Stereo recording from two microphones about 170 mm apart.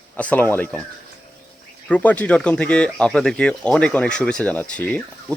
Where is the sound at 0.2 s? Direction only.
10° left (ahead or behind).